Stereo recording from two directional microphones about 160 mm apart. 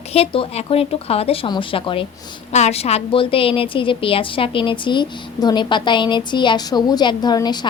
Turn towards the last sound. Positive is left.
turn(degrees=25)  # may be behind; listen again after turning